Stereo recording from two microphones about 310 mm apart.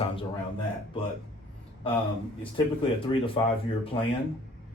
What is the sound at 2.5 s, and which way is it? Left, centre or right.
Speech, centre.